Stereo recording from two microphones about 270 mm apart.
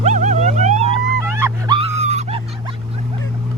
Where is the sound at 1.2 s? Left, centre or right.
Centre.